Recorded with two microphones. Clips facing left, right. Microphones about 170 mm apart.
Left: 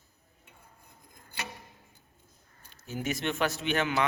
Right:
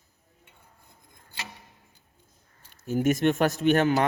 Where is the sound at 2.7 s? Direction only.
50° right (ahead or behind).